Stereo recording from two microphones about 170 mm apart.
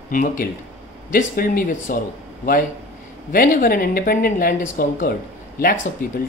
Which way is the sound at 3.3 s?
55° left (ahead or behind).